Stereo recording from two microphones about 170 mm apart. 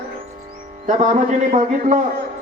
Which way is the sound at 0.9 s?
45° right (ahead or behind).